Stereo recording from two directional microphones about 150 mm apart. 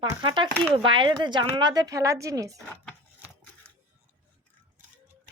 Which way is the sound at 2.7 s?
5° left (ahead or behind).